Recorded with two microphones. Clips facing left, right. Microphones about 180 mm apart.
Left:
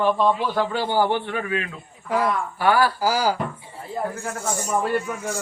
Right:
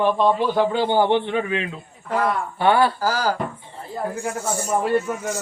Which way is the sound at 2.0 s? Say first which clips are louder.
Even; 10° left (ahead or behind).